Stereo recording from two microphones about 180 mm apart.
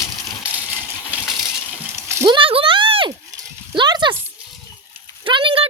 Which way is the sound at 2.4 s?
30° right (ahead or behind).